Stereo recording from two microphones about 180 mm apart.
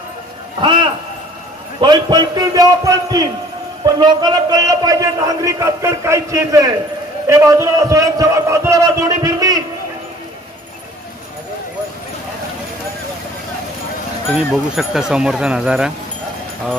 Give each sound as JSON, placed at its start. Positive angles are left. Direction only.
{"t": 0.6, "sound": "a sound", "side_deg": -25}
{"t": 1.8, "sound": "a man's voice", "side_deg": -25}
{"t": 14.5, "sound": "speech", "side_deg": -5}